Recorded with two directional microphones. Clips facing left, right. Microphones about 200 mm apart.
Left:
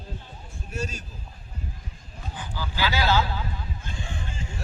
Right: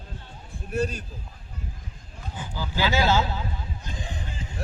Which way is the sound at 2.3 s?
20° right (ahead or behind).